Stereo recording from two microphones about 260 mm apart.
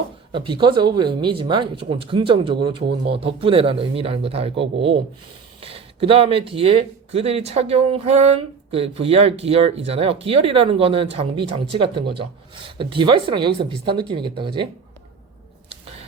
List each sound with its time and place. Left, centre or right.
0.3 s speech: centre